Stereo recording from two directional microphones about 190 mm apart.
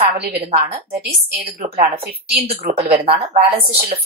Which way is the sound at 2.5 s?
30° right (ahead or behind).